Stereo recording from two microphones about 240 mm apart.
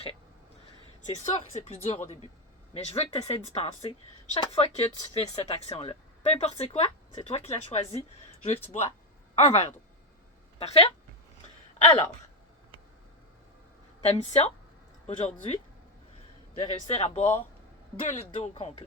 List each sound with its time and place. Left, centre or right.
1.0 s speech: left
14.0 s speech: left
16.6 s speech: left